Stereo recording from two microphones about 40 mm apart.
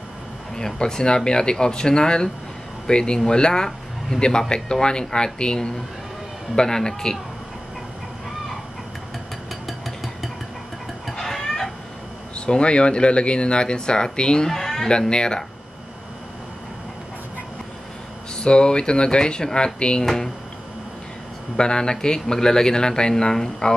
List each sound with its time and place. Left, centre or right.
0.6 s speech: centre
9.7 s a sound: centre
11.1 s chicken: centre
12.4 s speech: left
14.5 s a sound: centre
14.9 s speech: left
18.3 s speech: left
21.5 s speech: left